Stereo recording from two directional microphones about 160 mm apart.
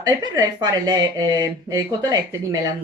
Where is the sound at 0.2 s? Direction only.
25° right (ahead or behind).